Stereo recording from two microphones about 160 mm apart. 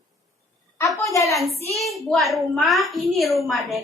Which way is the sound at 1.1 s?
20° left (ahead or behind).